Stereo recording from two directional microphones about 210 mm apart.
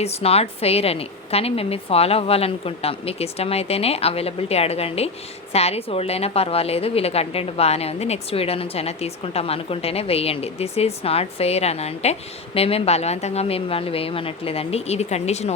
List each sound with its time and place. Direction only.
0.0 s a woman's voice: 30° left (ahead or behind)